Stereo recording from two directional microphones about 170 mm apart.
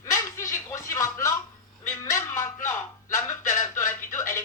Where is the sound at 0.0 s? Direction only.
15° left (ahead or behind).